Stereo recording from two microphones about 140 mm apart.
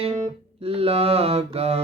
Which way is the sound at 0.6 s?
45° right (ahead or behind).